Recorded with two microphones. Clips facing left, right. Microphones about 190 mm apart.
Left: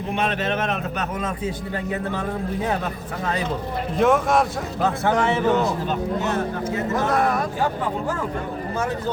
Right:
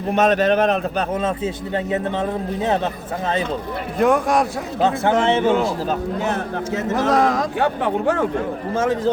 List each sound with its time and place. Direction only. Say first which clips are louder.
0.1 s a man's voice: right 8 dB; 40° right (ahead or behind)
1.7 s a man's voice: right 7 dB; 20° right (ahead or behind)
3.9 s a man's voice: right 1 dB; centre (ahead or behind)
4.8 s a man's voice: right 3 dB; 25° right (ahead or behind)
6.7 s speech: right 4 dB; 90° right; by 8.3 s 70° right (ahead or behind)
8.7 s speech: right 7 dB; 90° right